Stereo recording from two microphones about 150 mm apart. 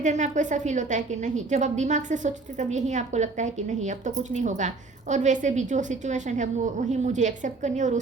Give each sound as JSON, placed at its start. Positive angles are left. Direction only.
{"t": 0.0, "sound": "a woman's voice", "side_deg": -55}